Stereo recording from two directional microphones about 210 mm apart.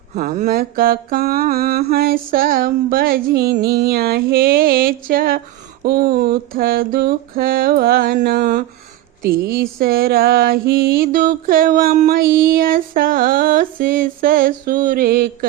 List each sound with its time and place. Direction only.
0.1 s music: 35° right (ahead or behind)